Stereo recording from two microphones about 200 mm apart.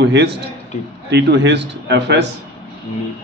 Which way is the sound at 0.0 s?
60° right (ahead or behind).